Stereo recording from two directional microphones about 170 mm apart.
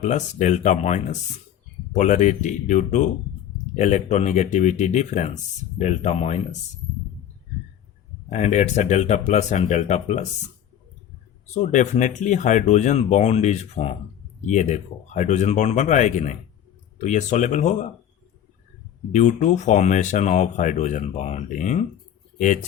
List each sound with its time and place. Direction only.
0.0 s speech: 45° left (ahead or behind)
8.3 s speech: 45° left (ahead or behind)
11.4 s speech: 45° left (ahead or behind)
19.1 s speech: 45° left (ahead or behind)